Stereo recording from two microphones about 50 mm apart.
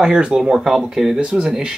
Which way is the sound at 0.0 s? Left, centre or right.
Centre.